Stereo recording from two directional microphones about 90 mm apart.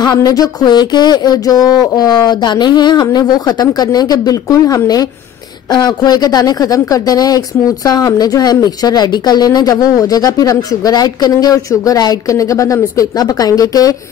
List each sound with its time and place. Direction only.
0.0 s speech: 45° left (ahead or behind)
5.7 s speech: 55° left (ahead or behind)